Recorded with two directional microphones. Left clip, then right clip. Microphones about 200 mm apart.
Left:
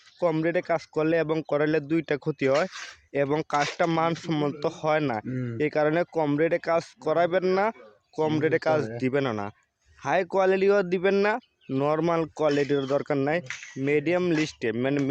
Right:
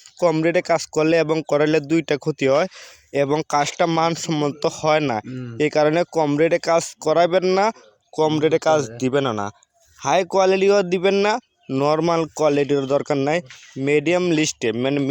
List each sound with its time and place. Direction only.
0.2 s a man's voice: 30° right (ahead or behind)
5.3 s speech: centre (ahead or behind)
5.5 s a man's voice: 25° right (ahead or behind)